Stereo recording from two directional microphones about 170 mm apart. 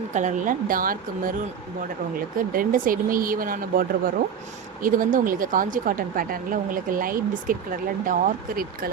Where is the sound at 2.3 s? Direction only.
55° right (ahead or behind).